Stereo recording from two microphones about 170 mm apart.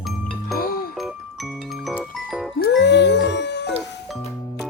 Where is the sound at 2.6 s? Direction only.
80° left.